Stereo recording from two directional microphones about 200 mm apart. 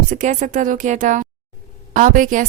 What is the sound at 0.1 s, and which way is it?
A woman's voice, 40° right (ahead or behind).